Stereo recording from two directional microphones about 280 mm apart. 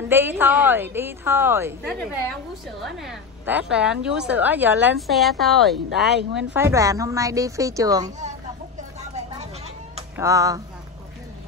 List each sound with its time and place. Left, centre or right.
0.1 s a woman's voice: centre
1.9 s a woman's voice: centre
10.1 s a woman's voice: centre